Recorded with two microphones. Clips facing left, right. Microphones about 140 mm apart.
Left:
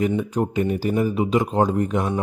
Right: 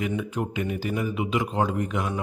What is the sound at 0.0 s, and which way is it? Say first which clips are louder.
Speech: left 6 dB; 35° left (ahead or behind).